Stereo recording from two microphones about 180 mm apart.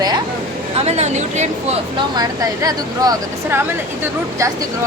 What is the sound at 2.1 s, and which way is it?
Speech, 20° right (ahead or behind).